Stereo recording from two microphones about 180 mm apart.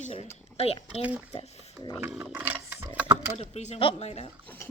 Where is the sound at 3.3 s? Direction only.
40° left (ahead or behind).